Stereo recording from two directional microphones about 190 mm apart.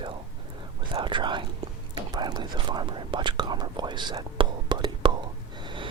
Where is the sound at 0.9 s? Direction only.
25° right (ahead or behind).